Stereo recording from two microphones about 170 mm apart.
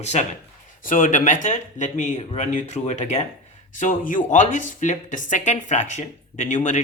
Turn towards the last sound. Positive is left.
turn(degrees=45)  # may be behind; listen again after turning